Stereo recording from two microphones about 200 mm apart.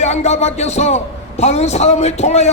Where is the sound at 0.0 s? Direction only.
35° left (ahead or behind).